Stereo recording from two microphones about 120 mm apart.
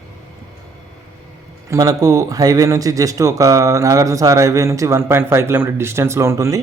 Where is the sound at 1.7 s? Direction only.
30° right (ahead or behind).